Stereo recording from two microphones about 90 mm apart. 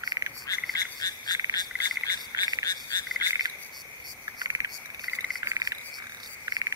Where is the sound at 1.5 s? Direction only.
45° left (ahead or behind).